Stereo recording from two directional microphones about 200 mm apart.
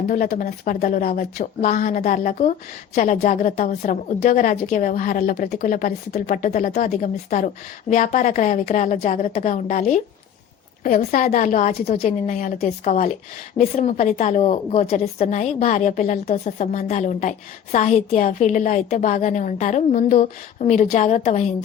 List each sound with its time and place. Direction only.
0.1 s a woman's voice: 45° left (ahead or behind)